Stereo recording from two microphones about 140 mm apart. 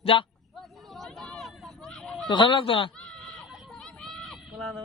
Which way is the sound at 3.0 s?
5° left (ahead or behind).